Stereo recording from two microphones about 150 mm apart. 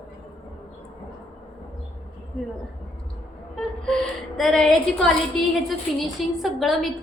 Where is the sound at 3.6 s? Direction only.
5° left (ahead or behind).